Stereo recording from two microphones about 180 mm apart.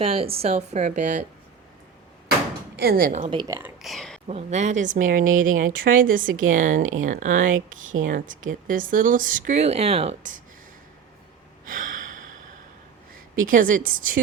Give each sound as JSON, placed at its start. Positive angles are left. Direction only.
{"t": 0.0, "sound": "speech", "side_deg": -30}
{"t": 2.7, "sound": "a woman's voice", "side_deg": -55}
{"t": 3.2, "sound": "speech", "side_deg": -25}
{"t": 3.8, "sound": "a sound", "side_deg": 0}
{"t": 4.3, "sound": "speech", "side_deg": -35}
{"t": 11.6, "sound": "gasp", "side_deg": -50}
{"t": 13.4, "sound": "speech", "side_deg": -50}